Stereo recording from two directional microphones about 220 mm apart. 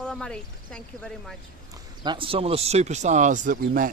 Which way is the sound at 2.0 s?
20° right (ahead or behind).